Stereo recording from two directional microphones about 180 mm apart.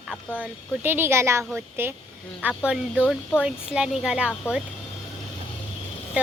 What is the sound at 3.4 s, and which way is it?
Speech, 5° right (ahead or behind).